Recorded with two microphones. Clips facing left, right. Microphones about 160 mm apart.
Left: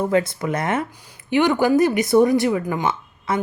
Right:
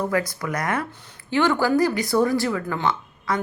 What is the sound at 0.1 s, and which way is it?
Speech, 25° left (ahead or behind).